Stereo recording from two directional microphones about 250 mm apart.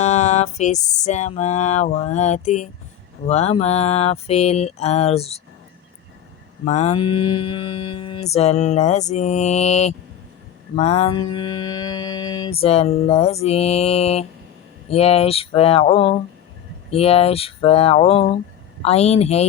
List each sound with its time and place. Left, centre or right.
0.0 s a sound: left
3.2 s mantra: left
6.7 s mantra: left